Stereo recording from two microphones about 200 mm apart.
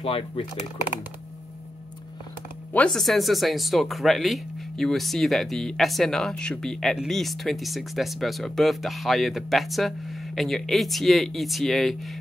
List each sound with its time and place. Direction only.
0.0 s speech: 30° left (ahead or behind)
2.7 s speech: 5° left (ahead or behind)